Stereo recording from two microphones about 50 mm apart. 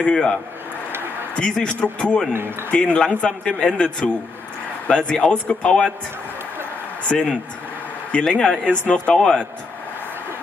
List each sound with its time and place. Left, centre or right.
0.0 s a man's voice: centre
1.6 s a man's voice: centre
7.1 s a man's voice: left
8.8 s a man's voice: left
9.1 s speech: centre